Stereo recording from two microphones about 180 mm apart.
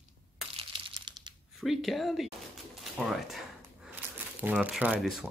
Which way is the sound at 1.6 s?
Centre (ahead or behind).